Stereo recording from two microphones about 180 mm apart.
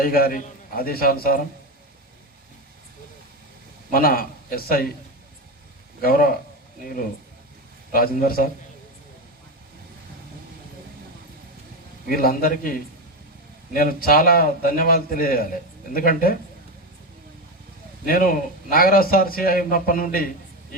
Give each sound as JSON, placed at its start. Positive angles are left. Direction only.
{"t": 0.0, "sound": "a man's voice", "side_deg": 55}
{"t": 3.9, "sound": "a man's voice", "side_deg": 55}
{"t": 6.0, "sound": "a man's voice", "side_deg": 55}
{"t": 7.9, "sound": "a man's voice", "side_deg": 55}
{"t": 12.0, "sound": "a man's voice", "side_deg": 55}
{"t": 18.0, "sound": "a man's voice", "side_deg": 55}